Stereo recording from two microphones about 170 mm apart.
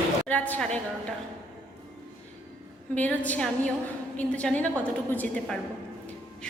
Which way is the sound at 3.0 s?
10° left (ahead or behind).